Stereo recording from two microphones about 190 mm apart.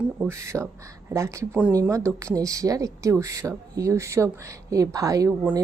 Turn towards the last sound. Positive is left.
turn(degrees=-15)  # may be behind; listen again after turning